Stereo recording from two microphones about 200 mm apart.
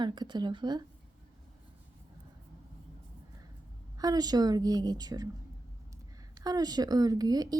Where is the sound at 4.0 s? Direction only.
20° right (ahead or behind).